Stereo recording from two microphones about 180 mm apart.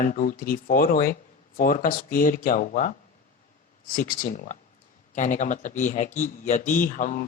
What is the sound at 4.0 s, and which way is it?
A man's voice, 50° left (ahead or behind).